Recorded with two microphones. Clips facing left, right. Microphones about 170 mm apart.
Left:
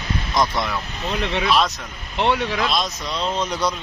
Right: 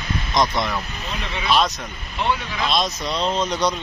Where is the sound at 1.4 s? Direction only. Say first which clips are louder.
Right 1 dB; centre (ahead or behind).